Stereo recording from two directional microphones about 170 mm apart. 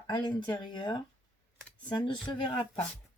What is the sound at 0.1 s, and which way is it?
Speech, 30° left (ahead or behind).